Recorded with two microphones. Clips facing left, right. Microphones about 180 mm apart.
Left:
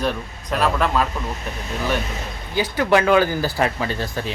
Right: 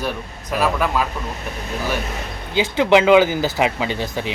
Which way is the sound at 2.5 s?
20° right (ahead or behind).